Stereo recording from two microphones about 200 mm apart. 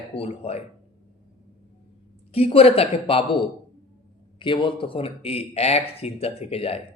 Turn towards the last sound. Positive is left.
turn(degrees=30)  # may be behind; listen again after turning